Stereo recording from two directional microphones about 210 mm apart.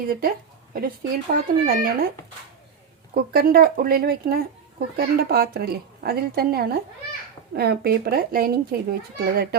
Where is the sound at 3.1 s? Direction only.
45° right (ahead or behind).